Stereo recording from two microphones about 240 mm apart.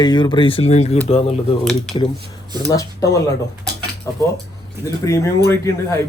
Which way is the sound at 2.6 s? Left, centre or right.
Centre.